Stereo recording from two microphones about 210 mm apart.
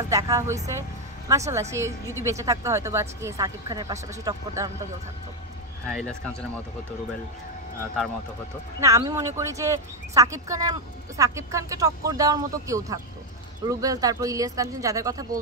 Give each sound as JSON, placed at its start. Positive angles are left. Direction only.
{"t": 0.1, "sound": "speech", "side_deg": -15}
{"t": 5.9, "sound": "speech", "side_deg": 5}
{"t": 8.8, "sound": "speech", "side_deg": -15}